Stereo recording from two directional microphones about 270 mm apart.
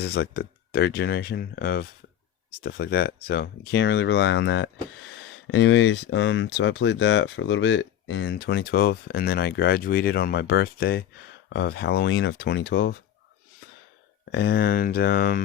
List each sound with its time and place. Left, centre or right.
0.0 s speech: left
14.3 s speech: left